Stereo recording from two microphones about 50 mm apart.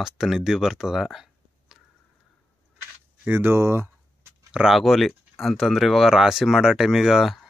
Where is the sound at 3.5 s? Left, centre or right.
Right.